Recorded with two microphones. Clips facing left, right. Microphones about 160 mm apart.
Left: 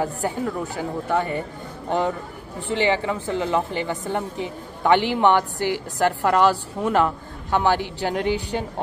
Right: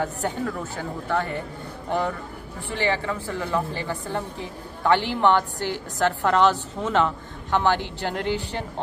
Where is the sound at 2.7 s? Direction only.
15° left (ahead or behind).